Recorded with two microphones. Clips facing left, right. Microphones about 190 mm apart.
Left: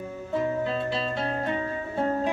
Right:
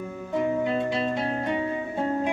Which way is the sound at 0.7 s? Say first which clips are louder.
Right 3 dB; 15° right (ahead or behind).